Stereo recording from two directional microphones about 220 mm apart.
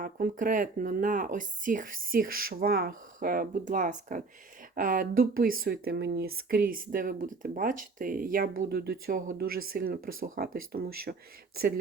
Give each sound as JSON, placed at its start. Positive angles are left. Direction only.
{"t": 0.0, "sound": "speech", "side_deg": -40}